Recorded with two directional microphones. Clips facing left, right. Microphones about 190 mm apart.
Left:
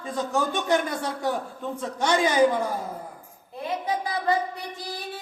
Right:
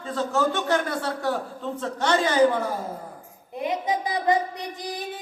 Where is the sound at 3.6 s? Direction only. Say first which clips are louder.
Right 2 dB; 15° right (ahead or behind).